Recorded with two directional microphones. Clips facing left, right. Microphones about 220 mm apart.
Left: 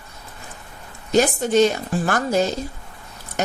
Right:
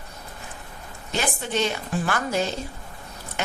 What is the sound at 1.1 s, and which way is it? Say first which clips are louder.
A woman's voice: left 10 dB; 40° left (ahead or behind).